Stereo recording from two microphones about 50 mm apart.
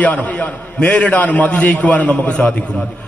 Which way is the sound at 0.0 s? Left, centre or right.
Left.